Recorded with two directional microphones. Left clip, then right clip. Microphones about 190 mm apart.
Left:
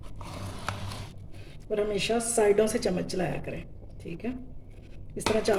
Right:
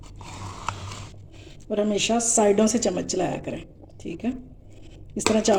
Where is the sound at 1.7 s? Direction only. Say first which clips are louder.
Right 4 dB; 30° right (ahead or behind).